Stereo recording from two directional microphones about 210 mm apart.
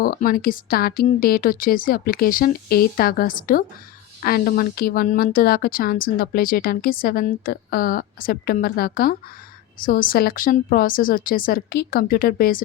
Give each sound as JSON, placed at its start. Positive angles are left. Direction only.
{"t": 0.0, "sound": "speech", "side_deg": 45}